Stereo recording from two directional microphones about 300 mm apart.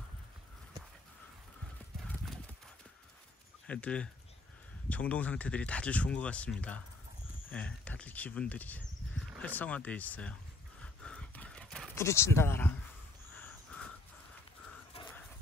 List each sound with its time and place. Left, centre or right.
2.0 s clip-clop: centre
3.6 s speech: centre
11.1 s pant: centre